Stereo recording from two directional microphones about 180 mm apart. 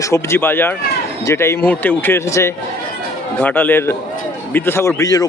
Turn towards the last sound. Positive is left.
turn(degrees=20)  # may be behind; listen again after turning